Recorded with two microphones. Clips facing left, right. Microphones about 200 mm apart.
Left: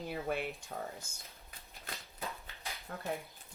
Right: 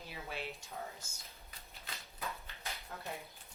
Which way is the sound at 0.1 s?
55° left (ahead or behind).